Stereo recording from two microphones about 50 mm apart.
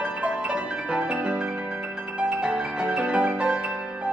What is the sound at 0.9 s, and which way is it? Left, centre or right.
Music, right.